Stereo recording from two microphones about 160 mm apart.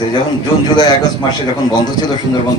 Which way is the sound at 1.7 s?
25° left (ahead or behind).